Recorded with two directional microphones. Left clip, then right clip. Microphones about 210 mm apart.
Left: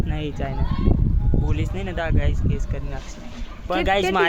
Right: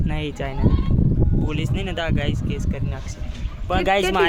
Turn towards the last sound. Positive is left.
turn(degrees=-25)  # may be behind; listen again after turning